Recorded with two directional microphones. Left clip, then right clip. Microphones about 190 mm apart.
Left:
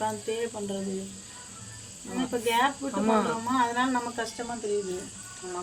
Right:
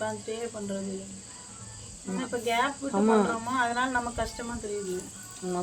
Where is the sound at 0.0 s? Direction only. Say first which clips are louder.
Left 3 dB; 45° left (ahead or behind).